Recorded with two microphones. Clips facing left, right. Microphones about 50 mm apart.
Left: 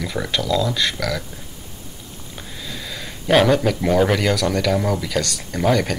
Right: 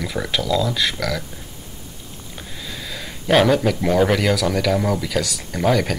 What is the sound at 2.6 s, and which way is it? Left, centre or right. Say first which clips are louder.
Speech: even; centre.